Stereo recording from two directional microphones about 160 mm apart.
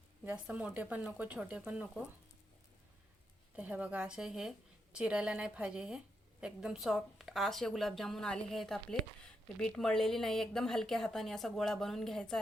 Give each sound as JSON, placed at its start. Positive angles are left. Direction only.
{"t": 0.3, "sound": "a woman's voice", "side_deg": -5}
{"t": 3.5, "sound": "a woman's voice", "side_deg": -10}